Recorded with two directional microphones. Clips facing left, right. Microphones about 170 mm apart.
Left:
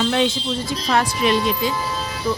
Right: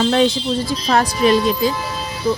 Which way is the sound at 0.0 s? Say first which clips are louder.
Right 4 dB; 40° right (ahead or behind).